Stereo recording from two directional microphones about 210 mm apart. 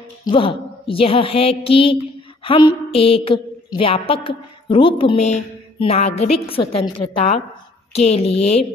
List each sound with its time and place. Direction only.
0.3 s a woman's voice: 25° left (ahead or behind)